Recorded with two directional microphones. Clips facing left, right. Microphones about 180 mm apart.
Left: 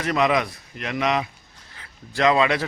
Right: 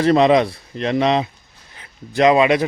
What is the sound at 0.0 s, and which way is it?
A man's voice, 30° right (ahead or behind).